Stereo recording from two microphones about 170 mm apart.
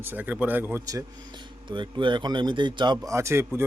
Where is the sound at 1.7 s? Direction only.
25° right (ahead or behind).